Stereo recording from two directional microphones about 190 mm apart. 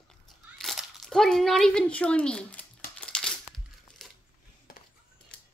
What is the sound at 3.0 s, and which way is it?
Crumpling, 5° left (ahead or behind).